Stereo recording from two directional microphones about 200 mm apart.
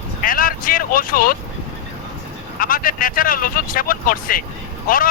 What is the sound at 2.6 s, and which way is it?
Speech, 45° left (ahead or behind).